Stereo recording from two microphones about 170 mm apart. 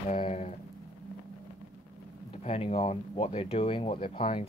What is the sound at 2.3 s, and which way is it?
Speech, 35° left (ahead or behind).